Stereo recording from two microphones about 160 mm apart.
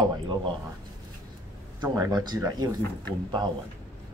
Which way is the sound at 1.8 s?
25° right (ahead or behind).